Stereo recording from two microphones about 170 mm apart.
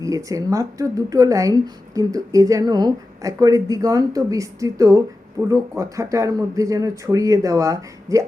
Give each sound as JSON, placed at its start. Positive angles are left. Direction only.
{"t": 0.0, "sound": "speech", "side_deg": -20}